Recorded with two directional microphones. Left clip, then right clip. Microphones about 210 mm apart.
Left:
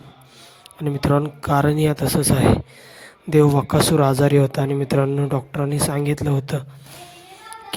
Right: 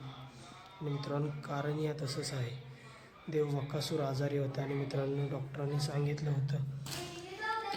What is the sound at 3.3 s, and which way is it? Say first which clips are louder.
Speech: left 19 dB; 45° left (ahead or behind).